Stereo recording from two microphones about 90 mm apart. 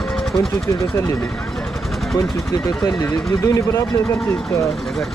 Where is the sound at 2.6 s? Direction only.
40° left (ahead or behind).